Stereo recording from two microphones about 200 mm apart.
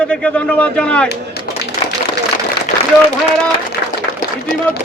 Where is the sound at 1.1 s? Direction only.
55° left (ahead or behind).